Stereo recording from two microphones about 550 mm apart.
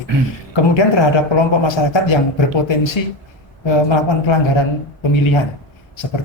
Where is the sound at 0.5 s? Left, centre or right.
Left.